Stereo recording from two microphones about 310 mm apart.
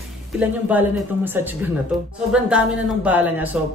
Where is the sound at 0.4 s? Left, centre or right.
Centre.